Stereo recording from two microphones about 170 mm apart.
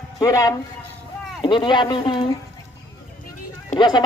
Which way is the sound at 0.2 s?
20° left (ahead or behind).